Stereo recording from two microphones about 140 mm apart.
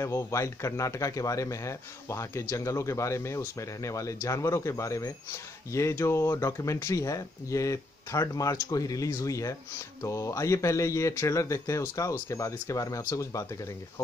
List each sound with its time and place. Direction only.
0.0 s speech: 20° left (ahead or behind)